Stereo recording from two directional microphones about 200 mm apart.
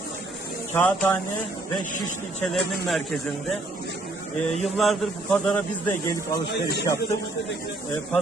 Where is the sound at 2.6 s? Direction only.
Centre (ahead or behind).